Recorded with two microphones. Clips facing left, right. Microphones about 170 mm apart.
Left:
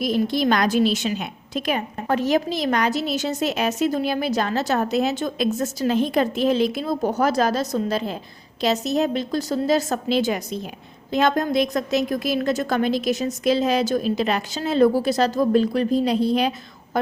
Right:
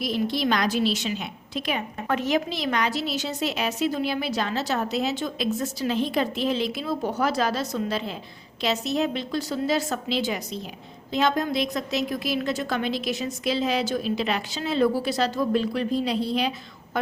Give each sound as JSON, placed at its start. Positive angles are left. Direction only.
{"t": 0.0, "sound": "a woman's voice", "side_deg": 45}